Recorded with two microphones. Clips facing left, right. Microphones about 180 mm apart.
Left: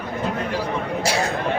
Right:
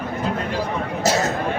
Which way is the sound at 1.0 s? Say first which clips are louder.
Right 4 dB; 40° right (ahead or behind).